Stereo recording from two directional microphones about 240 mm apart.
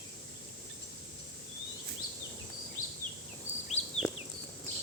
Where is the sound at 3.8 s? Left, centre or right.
Left.